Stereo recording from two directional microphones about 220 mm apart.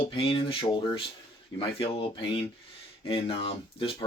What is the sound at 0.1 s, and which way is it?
Speech, 25° left (ahead or behind).